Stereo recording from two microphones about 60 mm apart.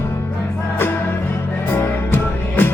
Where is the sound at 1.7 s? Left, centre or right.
Left.